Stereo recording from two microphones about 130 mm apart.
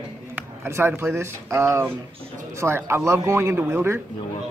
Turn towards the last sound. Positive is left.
turn(degrees=-20)  # may be behind; listen again after turning